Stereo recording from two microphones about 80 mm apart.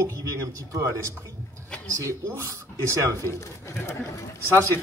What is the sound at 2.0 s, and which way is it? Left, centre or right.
A man's voice, right.